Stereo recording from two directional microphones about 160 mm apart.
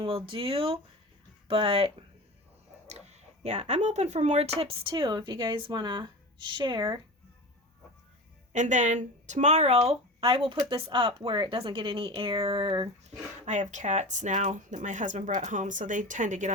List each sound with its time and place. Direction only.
0.0 s speech: 35° right (ahead or behind)
8.5 s speech: 50° right (ahead or behind); by 12.9 s 35° right (ahead or behind)
13.1 s speech: 50° right (ahead or behind)